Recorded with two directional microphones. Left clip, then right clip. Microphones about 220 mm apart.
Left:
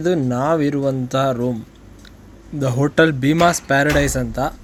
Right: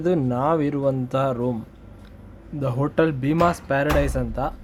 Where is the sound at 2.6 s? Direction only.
15° left (ahead or behind).